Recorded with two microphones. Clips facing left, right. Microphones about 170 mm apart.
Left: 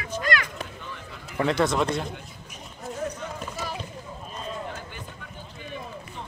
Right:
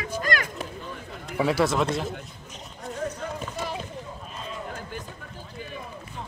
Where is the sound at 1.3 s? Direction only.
5° right (ahead or behind).